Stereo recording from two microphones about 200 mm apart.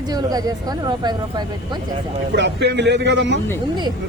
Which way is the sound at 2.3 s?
60° right (ahead or behind).